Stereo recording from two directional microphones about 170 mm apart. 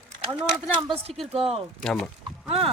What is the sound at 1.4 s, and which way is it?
Speech, 35° right (ahead or behind).